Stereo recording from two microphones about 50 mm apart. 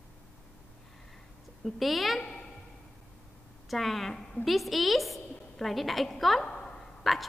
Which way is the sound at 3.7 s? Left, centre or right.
Centre.